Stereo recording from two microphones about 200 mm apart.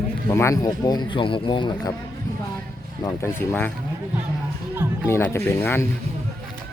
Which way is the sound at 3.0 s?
15° left (ahead or behind).